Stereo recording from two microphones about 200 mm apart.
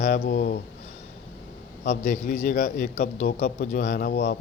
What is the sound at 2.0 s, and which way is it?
A man's voice, 35° left (ahead or behind).